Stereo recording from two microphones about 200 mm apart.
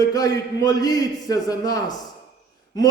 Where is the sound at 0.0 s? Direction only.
20° left (ahead or behind).